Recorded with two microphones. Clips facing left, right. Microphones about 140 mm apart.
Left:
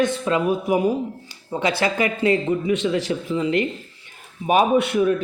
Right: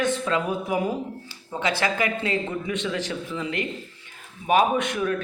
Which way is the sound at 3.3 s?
25° left (ahead or behind).